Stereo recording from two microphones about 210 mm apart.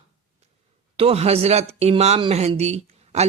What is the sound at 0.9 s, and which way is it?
Speech, 30° right (ahead or behind).